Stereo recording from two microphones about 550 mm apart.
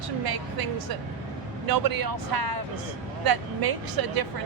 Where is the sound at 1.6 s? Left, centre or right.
Right.